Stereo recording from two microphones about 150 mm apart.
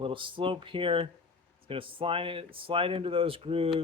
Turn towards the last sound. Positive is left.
turn(degrees=-40)  # may be behind; listen again after turning